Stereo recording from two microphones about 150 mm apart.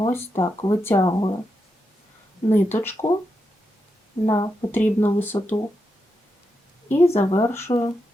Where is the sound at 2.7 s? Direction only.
15° left (ahead or behind).